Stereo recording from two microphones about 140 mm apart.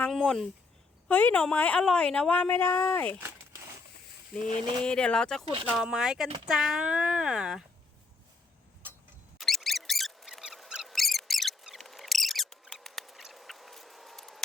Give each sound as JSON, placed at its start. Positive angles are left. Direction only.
{"t": 0.1, "sound": "a woman's voice", "side_deg": 5}
{"t": 3.2, "sound": "crumpling", "side_deg": -20}
{"t": 4.4, "sound": "speech", "side_deg": -35}
{"t": 4.8, "sound": "speech", "side_deg": 5}
{"t": 9.4, "sound": "a sound", "side_deg": 0}